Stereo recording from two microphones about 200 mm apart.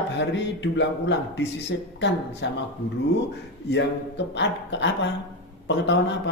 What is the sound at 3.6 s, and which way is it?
A man's voice, 60° left (ahead or behind).